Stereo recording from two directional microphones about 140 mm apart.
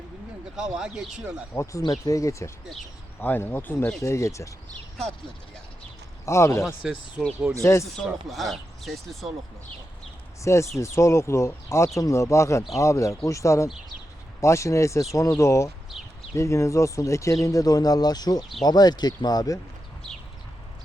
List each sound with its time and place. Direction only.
0.8 s speech: 5° right (ahead or behind)
1.8 s speech: 25° left (ahead or behind)
6.2 s speech: 20° left (ahead or behind)
6.7 s speech: 5° right (ahead or behind)
7.6 s speech: 20° left (ahead or behind)
7.9 s speech: centre (ahead or behind)
10.4 s speech: 20° left (ahead or behind)